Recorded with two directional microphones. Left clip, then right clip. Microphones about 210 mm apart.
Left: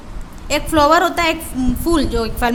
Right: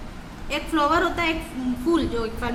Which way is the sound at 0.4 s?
50° left (ahead or behind).